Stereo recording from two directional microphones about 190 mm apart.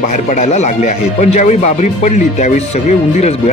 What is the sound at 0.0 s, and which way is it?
Speech, 40° left (ahead or behind).